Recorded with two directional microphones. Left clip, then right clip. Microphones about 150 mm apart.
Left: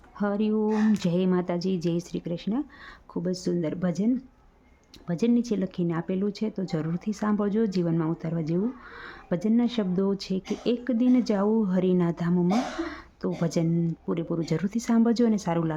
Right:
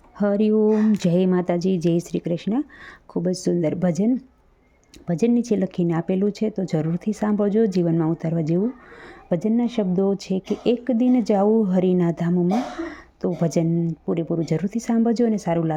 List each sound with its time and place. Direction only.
0.2 s speech: 25° right (ahead or behind)